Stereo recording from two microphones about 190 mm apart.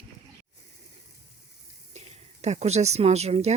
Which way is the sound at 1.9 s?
35° right (ahead or behind).